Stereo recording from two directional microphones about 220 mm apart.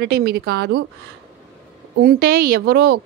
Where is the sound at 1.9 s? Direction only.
45° right (ahead or behind).